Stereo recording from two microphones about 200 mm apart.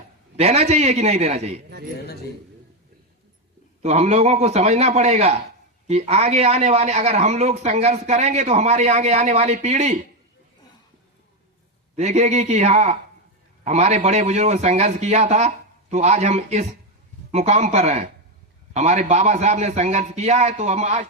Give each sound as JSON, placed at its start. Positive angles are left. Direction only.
{"t": 0.3, "sound": "speech", "side_deg": -30}
{"t": 3.8, "sound": "speech", "side_deg": -35}
{"t": 11.9, "sound": "speech", "side_deg": -35}